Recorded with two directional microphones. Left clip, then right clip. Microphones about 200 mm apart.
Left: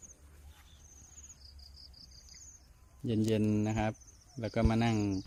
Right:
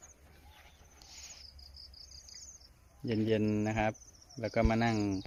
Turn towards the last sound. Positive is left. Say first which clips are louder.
# right 1 dB
turn(degrees=5)  # may be behind; listen again after turning